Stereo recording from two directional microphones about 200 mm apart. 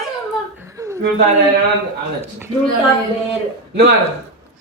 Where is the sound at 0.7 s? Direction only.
15° right (ahead or behind).